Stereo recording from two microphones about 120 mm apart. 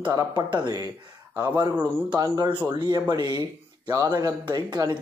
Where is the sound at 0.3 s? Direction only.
40° right (ahead or behind).